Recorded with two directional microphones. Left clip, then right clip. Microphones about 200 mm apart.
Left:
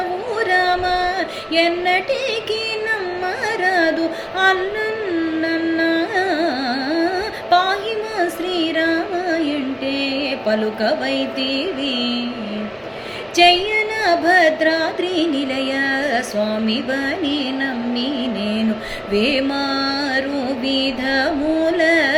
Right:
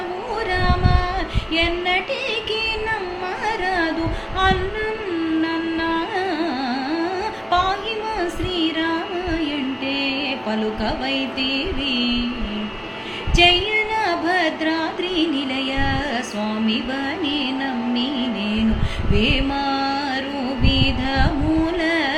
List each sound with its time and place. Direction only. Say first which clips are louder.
0.3 s music: left 5 dB; 15° left (ahead or behind)
3.4 s carnatic music: left 4 dB; 15° left (ahead or behind)
4.4 s music: left 3 dB; 15° left (ahead or behind)
5.4 s carnatic music: left 3 dB; 15° left (ahead or behind)
7.5 s a sound: left 4 dB; 20° left (ahead or behind)
8.2 s music: left 5 dB; 15° left (ahead or behind)
13.3 s music: left 2 dB; 15° left (ahead or behind)
21.8 s carnatic music: left 5 dB; 15° left (ahead or behind)